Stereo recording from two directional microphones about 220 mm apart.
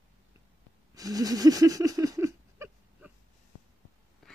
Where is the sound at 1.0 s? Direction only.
15° right (ahead or behind).